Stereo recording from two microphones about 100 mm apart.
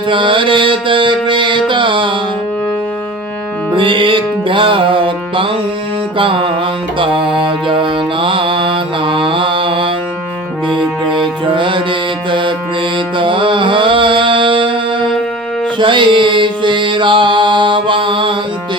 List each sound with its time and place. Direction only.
0.1 s mantra: 55° right (ahead or behind)
3.7 s music: 55° right (ahead or behind)
7.0 s mantra: 60° right (ahead or behind)
11.5 s music: 55° right (ahead or behind)
13.1 s mantra: 60° right (ahead or behind)
15.8 s music: 55° right (ahead or behind)